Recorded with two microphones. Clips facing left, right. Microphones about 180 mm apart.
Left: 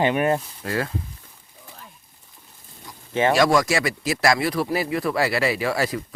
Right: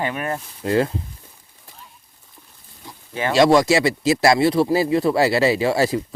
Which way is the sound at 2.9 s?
25° right (ahead or behind).